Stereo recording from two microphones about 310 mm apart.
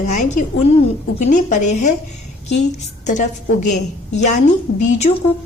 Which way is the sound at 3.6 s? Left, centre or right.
Left.